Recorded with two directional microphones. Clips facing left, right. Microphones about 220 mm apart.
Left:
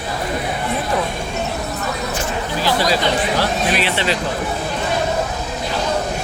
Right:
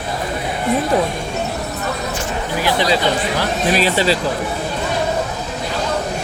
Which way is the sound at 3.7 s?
35° right (ahead or behind).